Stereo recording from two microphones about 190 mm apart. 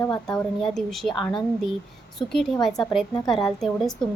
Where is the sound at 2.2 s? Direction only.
Centre (ahead or behind).